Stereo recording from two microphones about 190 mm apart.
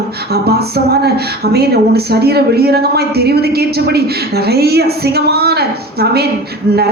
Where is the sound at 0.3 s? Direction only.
55° right (ahead or behind).